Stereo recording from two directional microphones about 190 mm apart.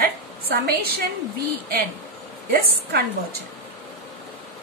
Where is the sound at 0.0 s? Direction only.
50° right (ahead or behind).